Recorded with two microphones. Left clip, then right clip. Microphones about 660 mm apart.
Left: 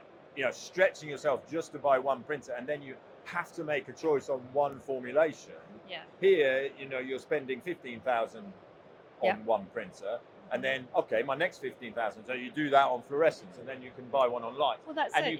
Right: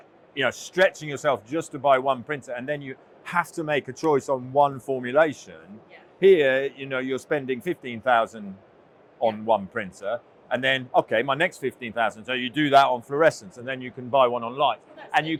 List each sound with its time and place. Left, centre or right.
0.3 s speech: right
7.6 s speech: right
9.5 s speech: right